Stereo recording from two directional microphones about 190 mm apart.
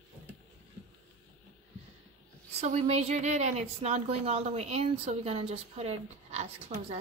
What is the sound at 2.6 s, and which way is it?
A woman's voice, 35° right (ahead or behind).